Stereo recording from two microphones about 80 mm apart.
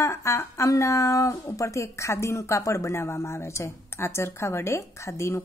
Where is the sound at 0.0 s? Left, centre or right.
Left.